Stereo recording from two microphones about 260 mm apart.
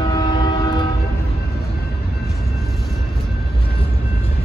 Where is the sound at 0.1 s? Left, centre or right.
Centre.